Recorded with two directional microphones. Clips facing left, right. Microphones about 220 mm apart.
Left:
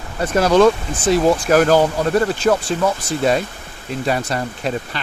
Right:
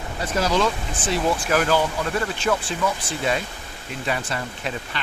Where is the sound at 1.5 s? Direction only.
45° left (ahead or behind).